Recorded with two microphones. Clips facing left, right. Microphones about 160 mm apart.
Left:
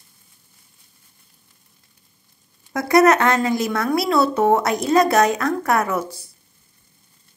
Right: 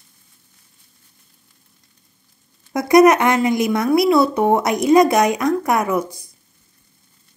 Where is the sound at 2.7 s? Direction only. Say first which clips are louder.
Right 3 dB; 15° right (ahead or behind).